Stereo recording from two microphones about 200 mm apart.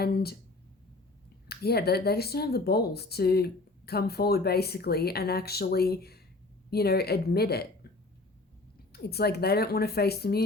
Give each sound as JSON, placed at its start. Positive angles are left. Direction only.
{"t": 0.0, "sound": "speech", "side_deg": 50}
{"t": 1.5, "sound": "speech", "side_deg": 50}
{"t": 8.9, "sound": "speech", "side_deg": 50}